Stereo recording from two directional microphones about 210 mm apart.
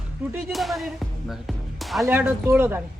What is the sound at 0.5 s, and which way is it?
Speech, centre (ahead or behind).